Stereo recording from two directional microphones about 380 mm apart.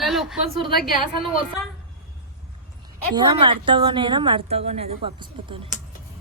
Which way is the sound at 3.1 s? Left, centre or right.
Centre.